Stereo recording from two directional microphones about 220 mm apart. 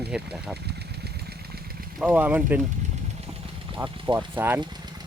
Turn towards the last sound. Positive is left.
turn(degrees=-10)  # may be behind; listen again after turning